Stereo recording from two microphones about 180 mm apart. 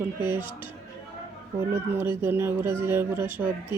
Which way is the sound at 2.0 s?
10° right (ahead or behind).